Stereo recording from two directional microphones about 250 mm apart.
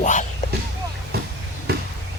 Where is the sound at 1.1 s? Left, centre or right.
Right.